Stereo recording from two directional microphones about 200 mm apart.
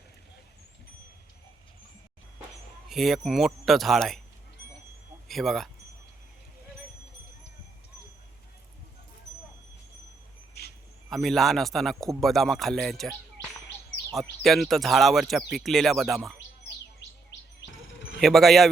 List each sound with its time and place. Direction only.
2.9 s speech: centre (ahead or behind)
5.3 s speech: centre (ahead or behind)
10.6 s cricket: 55° left (ahead or behind)
11.1 s speech: centre (ahead or behind)
14.2 s speech: centre (ahead or behind)
18.2 s speech: centre (ahead or behind)